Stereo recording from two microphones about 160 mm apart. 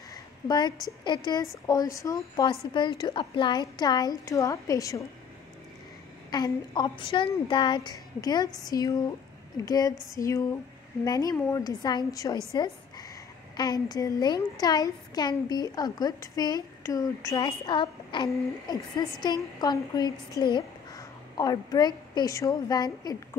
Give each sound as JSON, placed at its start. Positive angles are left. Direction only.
{"t": 0.1, "sound": "a sound", "side_deg": 25}
{"t": 1.0, "sound": "a woman's voice", "side_deg": 30}
{"t": 6.3, "sound": "a woman's voice", "side_deg": 25}